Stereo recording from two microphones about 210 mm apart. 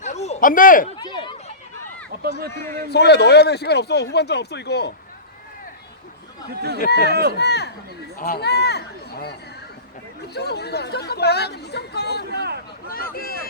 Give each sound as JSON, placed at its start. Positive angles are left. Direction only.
{"t": 0.0, "sound": "a sound", "side_deg": 30}
{"t": 0.9, "sound": "a sound", "side_deg": 20}
{"t": 2.9, "sound": "speech", "side_deg": 50}
{"t": 6.5, "sound": "speech", "side_deg": -50}
{"t": 6.7, "sound": "speech", "side_deg": 50}
{"t": 7.1, "sound": "speech", "side_deg": -50}
{"t": 7.3, "sound": "speech", "side_deg": 50}
{"t": 10.3, "sound": "speech", "side_deg": 50}
{"t": 12.3, "sound": "a sound", "side_deg": -50}